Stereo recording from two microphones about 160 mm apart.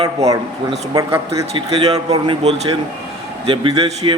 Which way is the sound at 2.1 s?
35° right (ahead or behind).